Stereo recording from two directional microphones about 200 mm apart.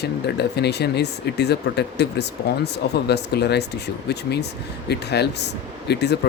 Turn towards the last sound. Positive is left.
turn(degrees=55)  # may be behind; listen again after turning